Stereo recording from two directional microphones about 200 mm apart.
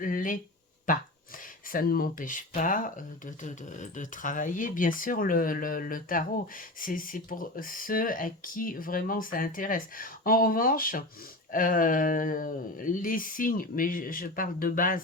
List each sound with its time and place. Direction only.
0.0 s speech: 45° left (ahead or behind)